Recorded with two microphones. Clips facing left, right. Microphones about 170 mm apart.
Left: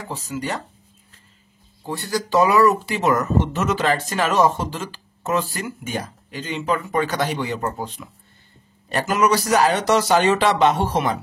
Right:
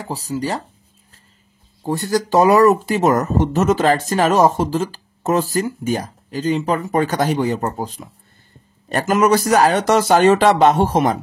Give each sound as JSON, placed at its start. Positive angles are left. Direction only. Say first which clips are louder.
{"t": 0.1, "sound": "speech", "louder": "right 5 dB", "side_deg": -35}
{"t": 1.9, "sound": "speech", "louder": "right 5 dB", "side_deg": -45}